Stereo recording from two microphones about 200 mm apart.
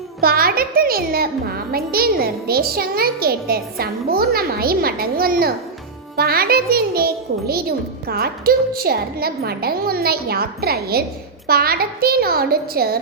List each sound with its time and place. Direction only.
0.2 s a child's voice: 50° right (ahead or behind)